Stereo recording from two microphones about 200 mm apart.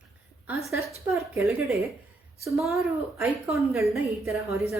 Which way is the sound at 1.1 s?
15° right (ahead or behind).